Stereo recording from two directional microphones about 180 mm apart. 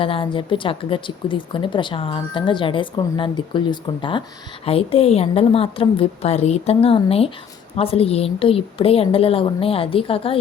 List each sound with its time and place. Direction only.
0.0 s a woman's voice: 30° left (ahead or behind)